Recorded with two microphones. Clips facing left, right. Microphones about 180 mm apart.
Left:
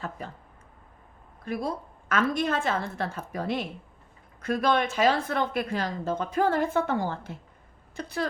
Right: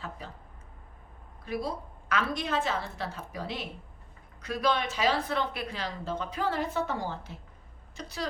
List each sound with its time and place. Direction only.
0.2 s a woman's voice: 50° left (ahead or behind)
1.5 s a woman's voice: 50° left (ahead or behind)